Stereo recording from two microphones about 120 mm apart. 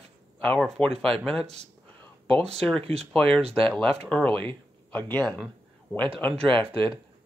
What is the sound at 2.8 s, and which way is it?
Speech, 55° right (ahead or behind).